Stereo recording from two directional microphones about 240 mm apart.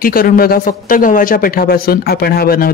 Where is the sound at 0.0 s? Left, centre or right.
Left.